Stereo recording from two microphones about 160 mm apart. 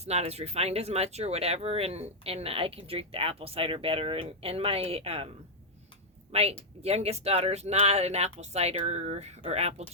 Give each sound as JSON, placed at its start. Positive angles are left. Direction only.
{"t": 0.0, "sound": "speech", "side_deg": -40}
{"t": 6.3, "sound": "speech", "side_deg": -40}